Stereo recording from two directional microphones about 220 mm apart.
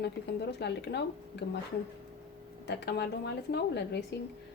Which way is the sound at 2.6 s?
50° left (ahead or behind).